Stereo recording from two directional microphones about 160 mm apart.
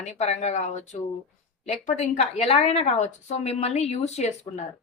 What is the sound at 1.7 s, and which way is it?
Speech, 50° left (ahead or behind).